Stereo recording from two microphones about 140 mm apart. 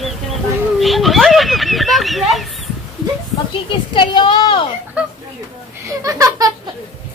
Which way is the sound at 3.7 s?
35° left (ahead or behind).